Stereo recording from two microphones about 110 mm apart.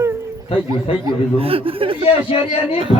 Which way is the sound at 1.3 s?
60° right (ahead or behind).